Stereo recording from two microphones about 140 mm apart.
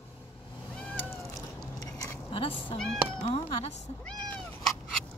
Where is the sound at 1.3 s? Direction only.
25° left (ahead or behind).